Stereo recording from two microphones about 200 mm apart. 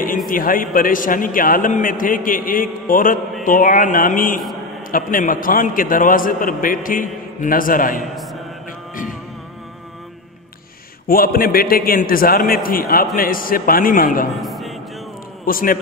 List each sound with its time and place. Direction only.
0.3 s a man's voice: 45° left (ahead or behind)
11.1 s a man's voice: 45° left (ahead or behind)
14.4 s music: centre (ahead or behind)
15.4 s a man's voice: 45° left (ahead or behind)